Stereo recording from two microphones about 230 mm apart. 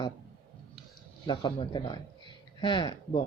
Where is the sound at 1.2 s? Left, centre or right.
Centre.